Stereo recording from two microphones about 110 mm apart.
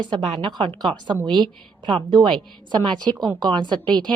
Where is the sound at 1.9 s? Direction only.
45° right (ahead or behind).